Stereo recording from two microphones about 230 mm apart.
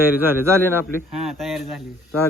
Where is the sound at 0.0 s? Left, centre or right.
Centre.